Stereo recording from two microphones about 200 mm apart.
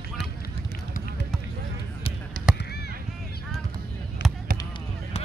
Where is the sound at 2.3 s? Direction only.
45° right (ahead or behind).